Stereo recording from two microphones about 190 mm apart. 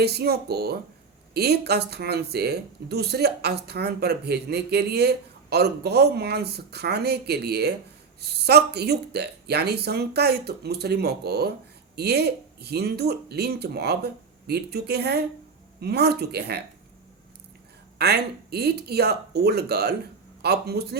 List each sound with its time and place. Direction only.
0.0 s speech: 55° right (ahead or behind)
17.9 s speech: 60° right (ahead or behind)